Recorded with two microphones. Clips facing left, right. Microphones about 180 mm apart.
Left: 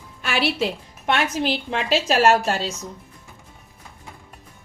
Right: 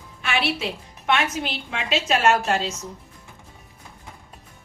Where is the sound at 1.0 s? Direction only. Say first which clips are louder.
Left 2 dB; 35° left (ahead or behind).